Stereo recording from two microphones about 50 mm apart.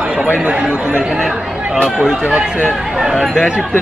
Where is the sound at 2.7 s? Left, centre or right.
Centre.